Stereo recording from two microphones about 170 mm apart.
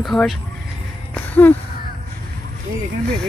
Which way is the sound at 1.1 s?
10° left (ahead or behind).